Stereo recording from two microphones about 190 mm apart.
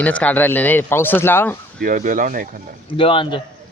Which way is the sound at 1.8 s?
45° right (ahead or behind).